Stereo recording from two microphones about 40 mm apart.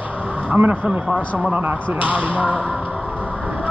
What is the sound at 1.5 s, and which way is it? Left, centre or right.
Speech, right.